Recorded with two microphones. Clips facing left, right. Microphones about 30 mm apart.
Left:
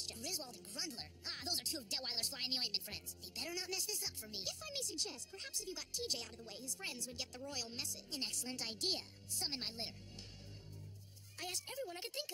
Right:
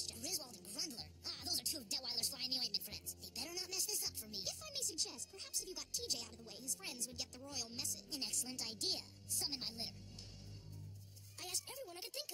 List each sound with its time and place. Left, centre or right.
0.0 s music: centre
0.5 s a woman's voice: left
11.3 s a woman's voice: left